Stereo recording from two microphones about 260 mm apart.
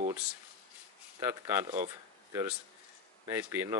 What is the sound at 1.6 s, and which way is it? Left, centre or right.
Speech, right.